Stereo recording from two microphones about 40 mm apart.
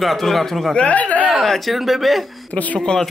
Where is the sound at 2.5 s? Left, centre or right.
Left.